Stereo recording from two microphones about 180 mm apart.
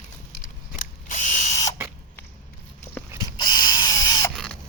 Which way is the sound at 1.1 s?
40° left (ahead or behind).